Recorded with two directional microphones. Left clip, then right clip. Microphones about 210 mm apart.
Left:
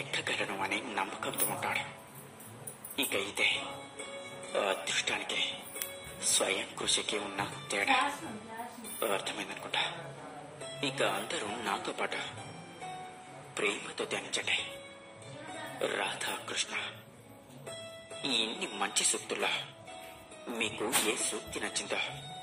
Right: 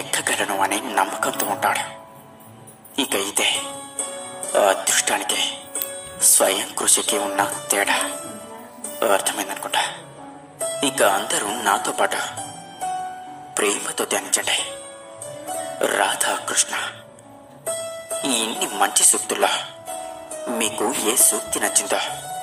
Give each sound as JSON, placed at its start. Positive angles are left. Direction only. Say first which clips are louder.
{"t": 0.1, "sound": "speech", "louder": "right 12 dB", "side_deg": -40}
{"t": 3.0, "sound": "speech", "louder": "right 9 dB", "side_deg": -40}
{"t": 9.0, "sound": "speech", "louder": "right 14 dB", "side_deg": -40}
{"t": 13.6, "sound": "speech", "louder": "right 11 dB", "side_deg": -40}
{"t": 15.8, "sound": "speech", "louder": "right 14 dB", "side_deg": -35}
{"t": 18.2, "sound": "speech", "louder": "right 8 dB", "side_deg": -40}